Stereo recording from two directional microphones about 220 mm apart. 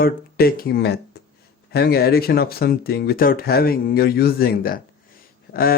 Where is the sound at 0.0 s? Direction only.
45° left (ahead or behind).